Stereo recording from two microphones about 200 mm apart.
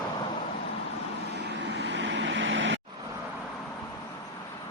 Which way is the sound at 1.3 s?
60° right (ahead or behind).